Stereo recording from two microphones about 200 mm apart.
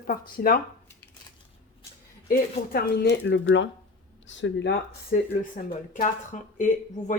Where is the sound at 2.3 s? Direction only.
50° left (ahead or behind).